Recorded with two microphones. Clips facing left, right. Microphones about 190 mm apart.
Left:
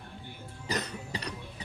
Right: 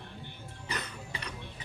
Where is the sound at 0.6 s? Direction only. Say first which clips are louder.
Left 5 dB; 40° left (ahead or behind).